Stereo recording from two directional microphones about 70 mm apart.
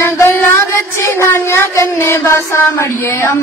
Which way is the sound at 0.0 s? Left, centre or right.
Left.